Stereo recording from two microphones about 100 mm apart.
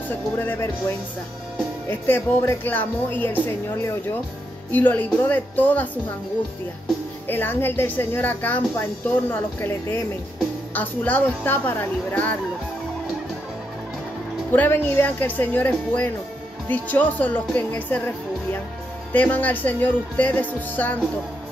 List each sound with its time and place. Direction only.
0.1 s a woman's voice: 20° left (ahead or behind)
7.2 s a woman's voice: 20° left (ahead or behind)
14.5 s speech: 15° left (ahead or behind)